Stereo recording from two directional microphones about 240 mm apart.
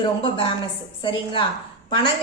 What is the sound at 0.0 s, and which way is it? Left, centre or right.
A woman's voice, left.